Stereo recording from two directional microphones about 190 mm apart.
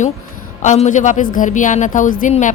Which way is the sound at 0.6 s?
40° left (ahead or behind).